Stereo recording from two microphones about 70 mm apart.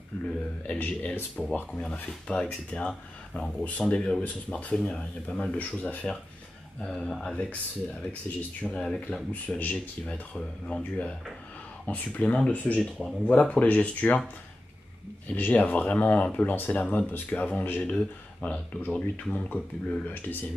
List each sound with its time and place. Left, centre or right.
0.1 s speech: centre
9.3 s speech: left
15.3 s speech: left